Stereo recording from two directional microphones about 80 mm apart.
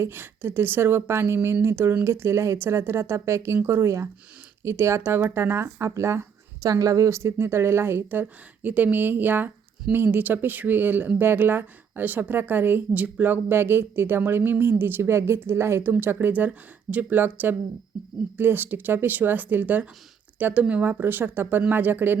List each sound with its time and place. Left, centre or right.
0.0 s speech: right